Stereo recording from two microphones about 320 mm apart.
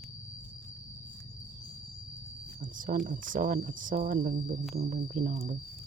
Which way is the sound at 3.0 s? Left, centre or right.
Right.